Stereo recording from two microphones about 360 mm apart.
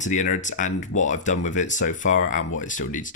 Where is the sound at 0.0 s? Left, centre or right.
Centre.